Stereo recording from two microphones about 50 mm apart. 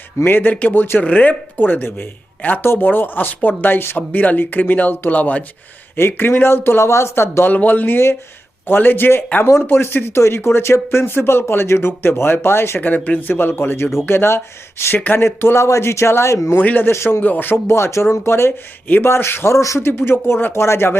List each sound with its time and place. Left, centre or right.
0.3 s speech: left
1.0 s speech: left
6.0 s speech: left
7.4 s speech: left
12.8 s speech: left
13.3 s speech: left
15.5 s a man's voice: left
16.6 s speech: left
16.8 s speech: left
17.2 s speech: left
17.7 s speech: left
19.5 s a man's voice: left
19.8 s speech: left